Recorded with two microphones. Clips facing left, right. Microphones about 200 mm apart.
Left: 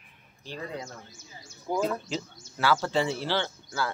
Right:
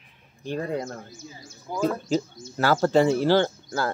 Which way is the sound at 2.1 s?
45° right (ahead or behind).